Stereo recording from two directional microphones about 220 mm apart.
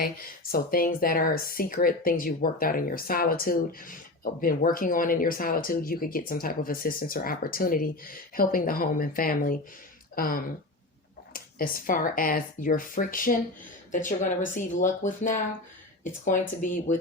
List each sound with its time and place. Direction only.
0.5 s speech: 40° left (ahead or behind)